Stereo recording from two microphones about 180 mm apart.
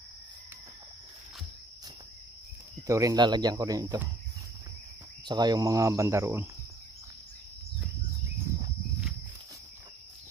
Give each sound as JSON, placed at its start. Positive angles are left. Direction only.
{"t": 2.9, "sound": "speech", "side_deg": -20}
{"t": 5.2, "sound": "cricket", "side_deg": -25}